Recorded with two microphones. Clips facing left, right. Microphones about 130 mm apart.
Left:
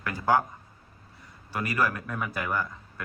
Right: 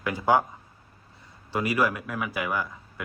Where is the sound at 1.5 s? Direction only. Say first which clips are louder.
Right 3 dB; 15° right (ahead or behind).